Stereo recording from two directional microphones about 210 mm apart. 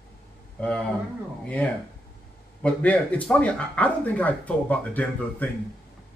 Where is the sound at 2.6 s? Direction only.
5° left (ahead or behind).